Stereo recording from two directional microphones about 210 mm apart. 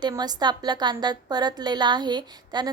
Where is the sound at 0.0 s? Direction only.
20° right (ahead or behind).